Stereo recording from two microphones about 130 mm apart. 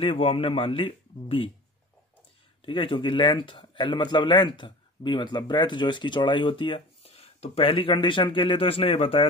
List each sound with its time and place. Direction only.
0.0 s a man's voice: 45° left (ahead or behind)
2.6 s speech: 40° left (ahead or behind)